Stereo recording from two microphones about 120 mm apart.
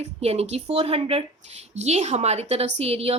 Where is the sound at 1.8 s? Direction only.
65° right (ahead or behind).